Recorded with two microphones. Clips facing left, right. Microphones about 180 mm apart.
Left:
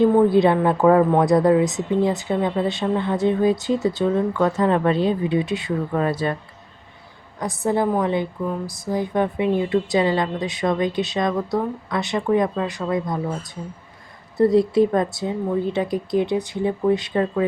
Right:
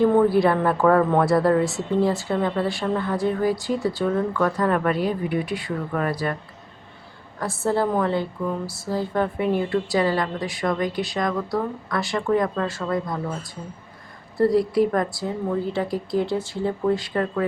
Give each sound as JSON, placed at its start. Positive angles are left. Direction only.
{"t": 0.1, "sound": "speech", "side_deg": 20}
{"t": 7.3, "sound": "a woman's voice", "side_deg": 15}
{"t": 14.3, "sound": "speech", "side_deg": 20}